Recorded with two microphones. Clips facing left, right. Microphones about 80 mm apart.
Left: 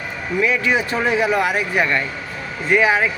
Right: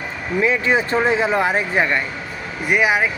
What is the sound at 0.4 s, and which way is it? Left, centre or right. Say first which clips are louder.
Speech: right 1 dB; right.